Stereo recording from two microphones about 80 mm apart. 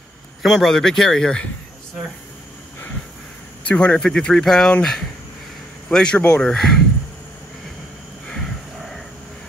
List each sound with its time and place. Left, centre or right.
0.4 s speech: centre
3.6 s speech: centre
6.4 s speech: centre
8.3 s a sound: centre